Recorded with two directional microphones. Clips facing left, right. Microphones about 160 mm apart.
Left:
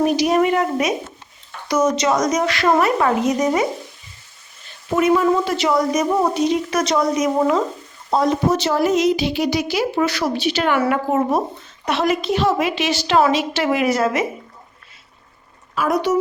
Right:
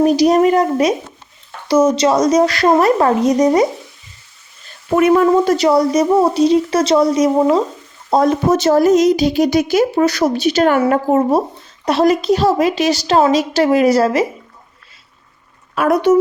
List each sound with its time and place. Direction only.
0.0 s a woman's voice: 35° right (ahead or behind)
4.9 s a woman's voice: 55° right (ahead or behind); by 7.6 s 30° right (ahead or behind)
8.2 s a woman's voice: 45° right (ahead or behind)
15.7 s a woman's voice: 60° right (ahead or behind)